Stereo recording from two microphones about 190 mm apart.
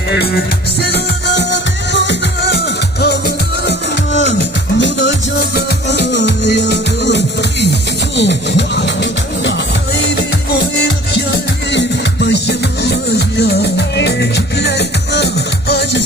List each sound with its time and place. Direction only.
0.1 s music: 55° left (ahead or behind)